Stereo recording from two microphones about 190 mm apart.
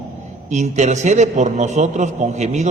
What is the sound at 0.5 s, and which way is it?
A man's voice, 40° right (ahead or behind).